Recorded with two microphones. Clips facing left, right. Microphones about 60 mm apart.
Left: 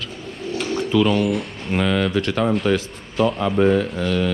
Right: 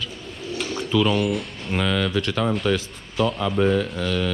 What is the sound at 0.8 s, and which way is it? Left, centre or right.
Speech, left.